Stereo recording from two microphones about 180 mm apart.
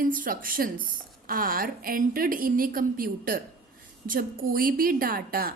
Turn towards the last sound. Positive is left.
turn(degrees=-55)  # may be behind; listen again after turning